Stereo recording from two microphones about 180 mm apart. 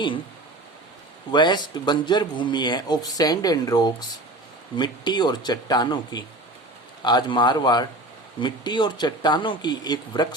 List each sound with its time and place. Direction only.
1.3 s speech: 25° left (ahead or behind)